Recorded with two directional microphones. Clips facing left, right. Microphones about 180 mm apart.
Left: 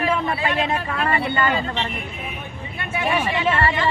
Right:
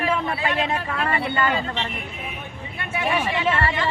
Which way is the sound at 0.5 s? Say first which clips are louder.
Left 2 dB; 20° left (ahead or behind).